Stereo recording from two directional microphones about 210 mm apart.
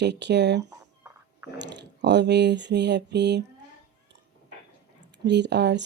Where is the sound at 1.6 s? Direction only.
55° right (ahead or behind).